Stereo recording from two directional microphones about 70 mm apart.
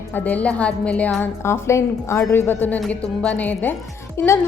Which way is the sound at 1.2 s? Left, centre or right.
Left.